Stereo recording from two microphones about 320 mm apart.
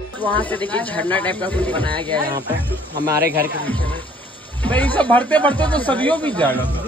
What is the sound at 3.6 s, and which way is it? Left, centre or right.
Speech, centre.